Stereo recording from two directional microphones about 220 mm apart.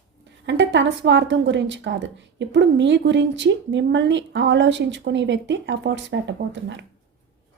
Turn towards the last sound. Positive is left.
turn(degrees=-55)  # may be behind; listen again after turning